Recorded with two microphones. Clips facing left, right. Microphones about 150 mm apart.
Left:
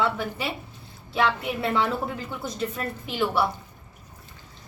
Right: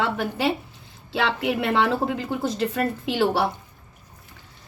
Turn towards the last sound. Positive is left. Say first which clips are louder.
# right 3 dB
turn(degrees=-80)